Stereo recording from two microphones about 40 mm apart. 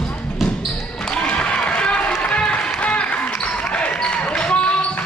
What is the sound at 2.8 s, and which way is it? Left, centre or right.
Music, left.